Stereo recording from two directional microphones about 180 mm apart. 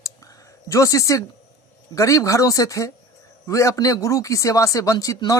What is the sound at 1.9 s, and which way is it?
Speech, 15° left (ahead or behind).